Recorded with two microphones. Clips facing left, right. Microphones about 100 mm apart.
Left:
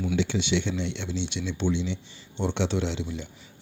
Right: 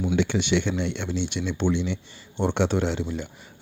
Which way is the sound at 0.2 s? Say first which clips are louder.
Right 3 dB; 55° right (ahead or behind).